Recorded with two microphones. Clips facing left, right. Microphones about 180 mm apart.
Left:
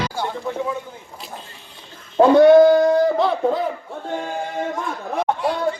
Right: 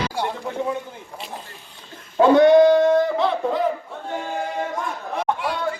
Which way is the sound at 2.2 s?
40° left (ahead or behind).